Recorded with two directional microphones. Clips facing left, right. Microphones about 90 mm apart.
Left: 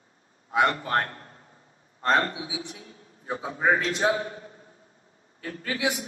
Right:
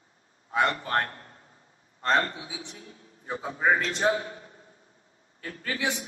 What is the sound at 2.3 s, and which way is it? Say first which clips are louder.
Speech: left 5 dB; 40° right (ahead or behind).